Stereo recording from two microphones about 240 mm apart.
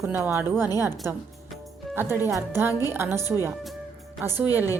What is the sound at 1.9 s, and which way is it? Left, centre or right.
Speech, centre.